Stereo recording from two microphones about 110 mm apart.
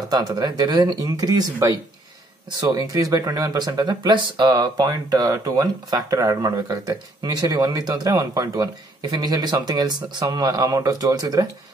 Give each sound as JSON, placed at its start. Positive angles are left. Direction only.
{"t": 0.1, "sound": "speech", "side_deg": -40}